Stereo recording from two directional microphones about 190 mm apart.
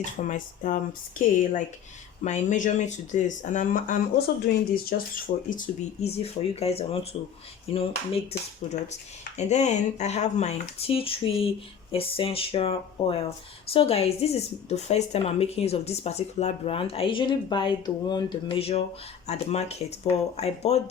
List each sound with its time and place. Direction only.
0.2 s speech: 45° left (ahead or behind)
5.5 s speech: 45° left (ahead or behind)